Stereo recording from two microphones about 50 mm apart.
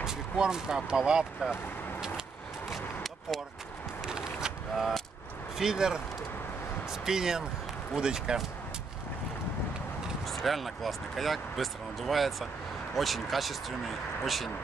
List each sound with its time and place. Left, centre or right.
0.0 s speech: centre
2.7 s a sound: centre
5.6 s speech: centre
10.2 s speech: centre